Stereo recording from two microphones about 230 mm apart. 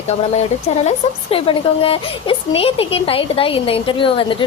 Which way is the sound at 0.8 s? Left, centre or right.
Left.